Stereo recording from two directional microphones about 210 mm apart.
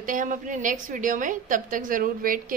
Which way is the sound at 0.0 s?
40° right (ahead or behind).